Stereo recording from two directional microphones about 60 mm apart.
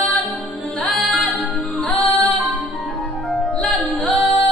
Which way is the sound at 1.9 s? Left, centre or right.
Left.